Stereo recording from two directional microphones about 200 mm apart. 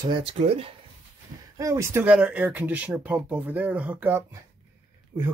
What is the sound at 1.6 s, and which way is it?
Speech, 15° right (ahead or behind).